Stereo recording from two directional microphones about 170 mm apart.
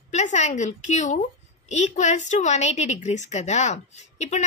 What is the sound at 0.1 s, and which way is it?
A woman's voice, 45° left (ahead or behind).